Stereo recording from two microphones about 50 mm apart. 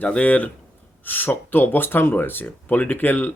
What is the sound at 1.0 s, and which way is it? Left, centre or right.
Speech, left.